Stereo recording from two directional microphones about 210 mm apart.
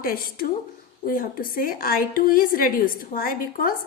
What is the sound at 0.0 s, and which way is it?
A woman's voice, 45° left (ahead or behind).